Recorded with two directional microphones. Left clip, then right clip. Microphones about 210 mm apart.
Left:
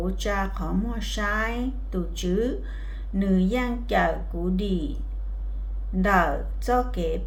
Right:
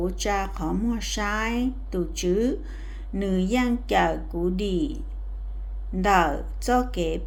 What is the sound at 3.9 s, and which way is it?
Speech, 35° right (ahead or behind).